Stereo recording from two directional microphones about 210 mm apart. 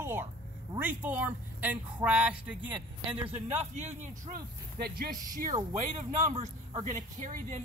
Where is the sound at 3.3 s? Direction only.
35° right (ahead or behind).